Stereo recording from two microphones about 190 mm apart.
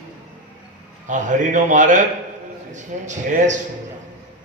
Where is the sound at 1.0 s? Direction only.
40° right (ahead or behind).